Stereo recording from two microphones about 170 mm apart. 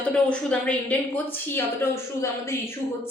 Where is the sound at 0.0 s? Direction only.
5° left (ahead or behind).